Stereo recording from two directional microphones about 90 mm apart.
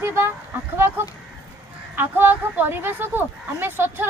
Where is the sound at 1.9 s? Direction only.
20° right (ahead or behind).